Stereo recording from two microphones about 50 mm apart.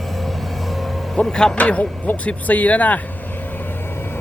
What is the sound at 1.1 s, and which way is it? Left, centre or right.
Speech, centre.